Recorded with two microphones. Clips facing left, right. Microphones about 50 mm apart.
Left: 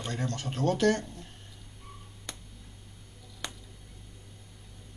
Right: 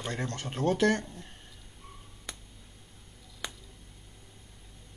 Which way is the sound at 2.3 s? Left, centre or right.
Centre.